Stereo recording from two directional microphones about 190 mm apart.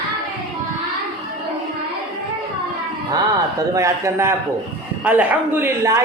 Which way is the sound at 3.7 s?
15° right (ahead or behind).